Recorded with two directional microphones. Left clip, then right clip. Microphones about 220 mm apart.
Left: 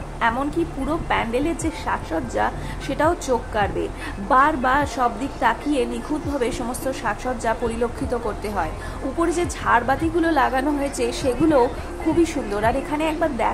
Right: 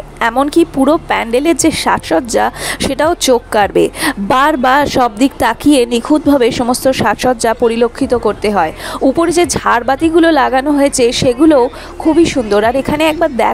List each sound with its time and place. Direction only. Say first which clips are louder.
0.2 s a woman's voice: right 11 dB; 45° right (ahead or behind)